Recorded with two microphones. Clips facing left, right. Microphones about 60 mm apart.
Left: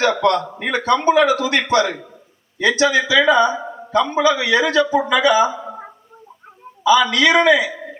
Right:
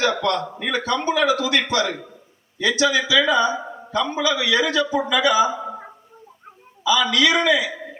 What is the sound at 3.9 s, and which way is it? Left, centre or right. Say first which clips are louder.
A man's voice: left 6 dB; left.